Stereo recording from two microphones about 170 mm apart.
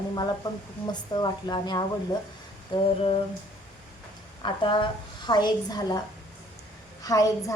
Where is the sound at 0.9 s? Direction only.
25° left (ahead or behind).